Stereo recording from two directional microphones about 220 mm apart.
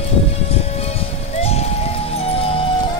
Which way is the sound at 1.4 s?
30° left (ahead or behind).